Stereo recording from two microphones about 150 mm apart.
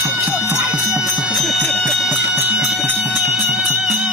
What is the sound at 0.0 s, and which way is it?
Music, 15° right (ahead or behind).